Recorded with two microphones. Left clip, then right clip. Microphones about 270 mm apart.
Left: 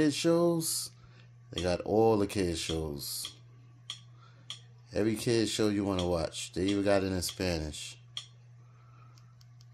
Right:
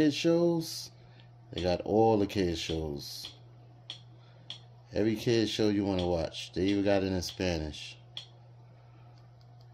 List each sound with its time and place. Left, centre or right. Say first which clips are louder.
0.0 s speech: even; centre
4.9 s speech: right 1 dB; centre